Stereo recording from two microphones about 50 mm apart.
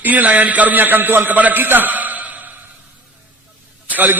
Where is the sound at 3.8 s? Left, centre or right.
Right.